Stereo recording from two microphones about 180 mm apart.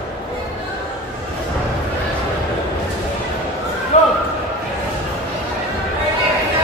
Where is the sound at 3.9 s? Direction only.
40° left (ahead or behind).